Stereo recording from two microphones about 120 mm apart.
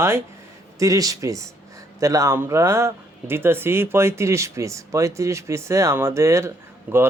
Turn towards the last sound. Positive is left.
turn(degrees=-20)  # may be behind; listen again after turning